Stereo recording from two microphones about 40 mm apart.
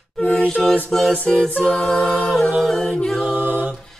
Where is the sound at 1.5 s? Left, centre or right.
Left.